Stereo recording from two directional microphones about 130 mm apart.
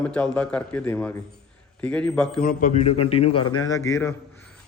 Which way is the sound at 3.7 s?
25° left (ahead or behind).